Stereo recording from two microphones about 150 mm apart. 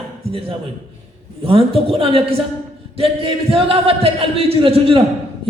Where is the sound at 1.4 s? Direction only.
40° right (ahead or behind).